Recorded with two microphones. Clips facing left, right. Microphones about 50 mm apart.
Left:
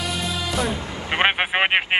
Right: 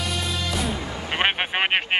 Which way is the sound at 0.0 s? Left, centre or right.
Centre.